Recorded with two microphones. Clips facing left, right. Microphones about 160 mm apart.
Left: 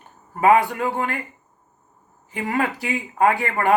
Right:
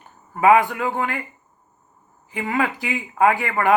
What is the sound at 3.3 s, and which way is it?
Speech, 35° left (ahead or behind).